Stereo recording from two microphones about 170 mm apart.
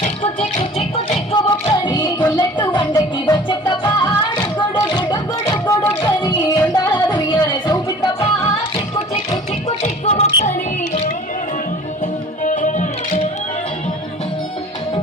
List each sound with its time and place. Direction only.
1.3 s music: 25° left (ahead or behind)
4.7 s a sound: 25° left (ahead or behind)
6.1 s music: 25° left (ahead or behind)
9.6 s music: 40° left (ahead or behind)
12.4 s music: 50° left (ahead or behind)